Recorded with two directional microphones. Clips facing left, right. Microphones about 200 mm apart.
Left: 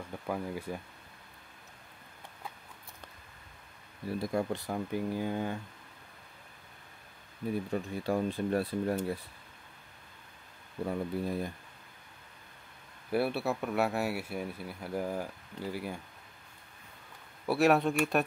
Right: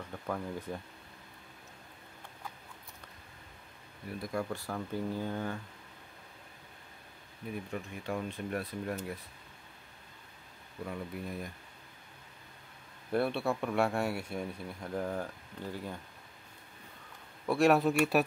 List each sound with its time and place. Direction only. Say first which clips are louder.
0.3 s speech: left 2 dB; 10° left (ahead or behind)
4.1 s speech: left 4 dB; 25° left (ahead or behind)
7.5 s speech: left 5 dB; 35° left (ahead or behind)
10.9 s speech: left 7 dB; 30° left (ahead or behind)
13.1 s speech: left 1 dB; 5° left (ahead or behind)
17.5 s speech: even; centre (ahead or behind)